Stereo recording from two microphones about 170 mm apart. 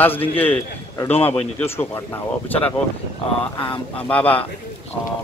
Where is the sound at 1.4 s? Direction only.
10° left (ahead or behind).